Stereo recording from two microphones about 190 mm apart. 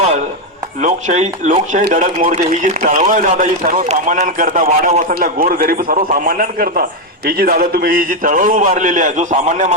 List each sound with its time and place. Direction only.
0.8 s a man's voice: 40° right (ahead or behind)